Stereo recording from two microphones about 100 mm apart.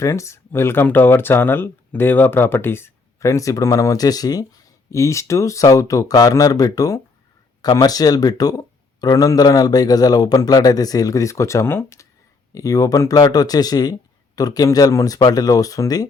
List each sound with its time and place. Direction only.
0.0 s speech: 30° left (ahead or behind)